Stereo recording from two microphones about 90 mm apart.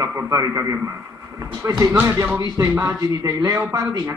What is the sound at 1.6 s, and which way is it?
A man's voice, 30° right (ahead or behind).